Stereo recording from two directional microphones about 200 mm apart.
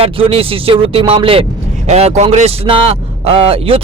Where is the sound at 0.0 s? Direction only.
30° right (ahead or behind).